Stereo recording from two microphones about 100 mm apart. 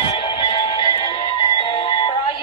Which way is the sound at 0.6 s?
45° left (ahead or behind).